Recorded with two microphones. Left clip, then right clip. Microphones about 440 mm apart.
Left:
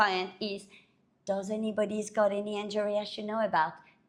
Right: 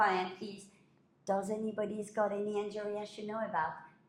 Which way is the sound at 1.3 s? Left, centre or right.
Centre.